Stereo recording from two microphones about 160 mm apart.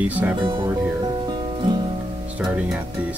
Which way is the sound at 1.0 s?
30° right (ahead or behind).